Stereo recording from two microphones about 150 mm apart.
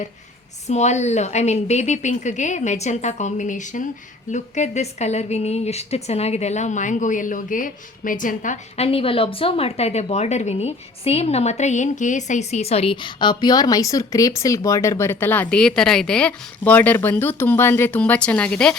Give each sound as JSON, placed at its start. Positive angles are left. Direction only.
{"t": 0.7, "sound": "a woman's voice", "side_deg": 50}